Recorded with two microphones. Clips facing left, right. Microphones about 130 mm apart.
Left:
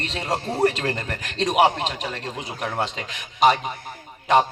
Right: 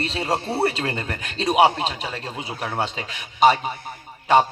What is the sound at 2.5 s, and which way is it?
Speech, 25° right (ahead or behind).